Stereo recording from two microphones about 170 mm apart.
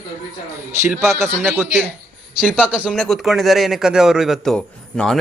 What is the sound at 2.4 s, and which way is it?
A man's voice, 5° right (ahead or behind).